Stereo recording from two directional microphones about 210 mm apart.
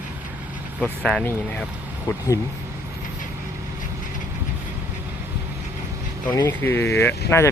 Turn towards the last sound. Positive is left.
turn(degrees=10)  # may be behind; listen again after turning